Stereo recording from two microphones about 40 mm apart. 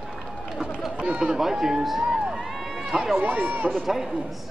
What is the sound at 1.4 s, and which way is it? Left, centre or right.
Speech, centre.